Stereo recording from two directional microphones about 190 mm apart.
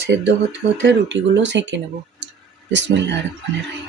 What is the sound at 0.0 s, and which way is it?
Speech, 65° right (ahead or behind).